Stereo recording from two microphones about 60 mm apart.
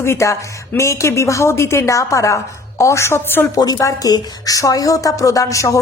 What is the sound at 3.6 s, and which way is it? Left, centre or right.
A woman's voice, left.